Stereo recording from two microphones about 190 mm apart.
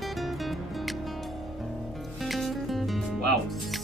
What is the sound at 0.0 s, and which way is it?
Music, centre (ahead or behind).